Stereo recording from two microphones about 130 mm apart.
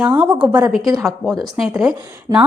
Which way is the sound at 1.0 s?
Centre (ahead or behind).